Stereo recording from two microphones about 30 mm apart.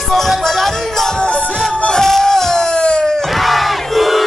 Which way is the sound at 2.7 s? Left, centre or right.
Left.